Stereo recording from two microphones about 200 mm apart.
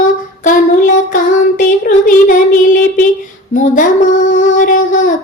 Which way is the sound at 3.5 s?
40° left (ahead or behind).